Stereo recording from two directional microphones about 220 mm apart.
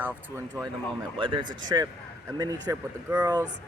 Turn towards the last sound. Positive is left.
turn(degrees=-10)  # may be behind; listen again after turning